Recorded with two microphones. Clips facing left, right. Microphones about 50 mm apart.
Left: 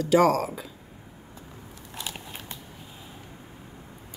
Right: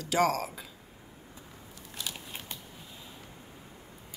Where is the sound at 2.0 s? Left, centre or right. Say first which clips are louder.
Left 3 dB; left.